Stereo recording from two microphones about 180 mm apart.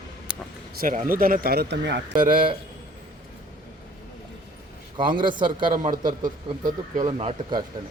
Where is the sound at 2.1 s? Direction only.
25° right (ahead or behind).